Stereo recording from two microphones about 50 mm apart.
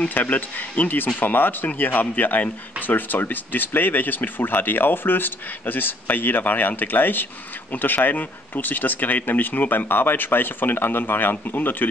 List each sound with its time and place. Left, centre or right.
0.1 s speech: left